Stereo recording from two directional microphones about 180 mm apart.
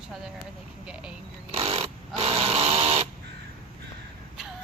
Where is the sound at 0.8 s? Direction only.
5° right (ahead or behind).